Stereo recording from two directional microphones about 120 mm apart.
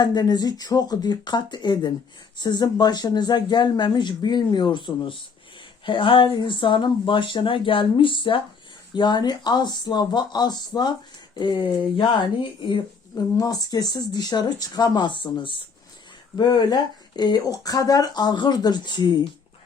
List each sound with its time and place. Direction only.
0.0 s speech: 35° left (ahead or behind)
13.1 s speech: 30° left (ahead or behind)